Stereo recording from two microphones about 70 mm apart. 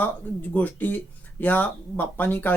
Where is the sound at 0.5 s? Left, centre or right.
Left.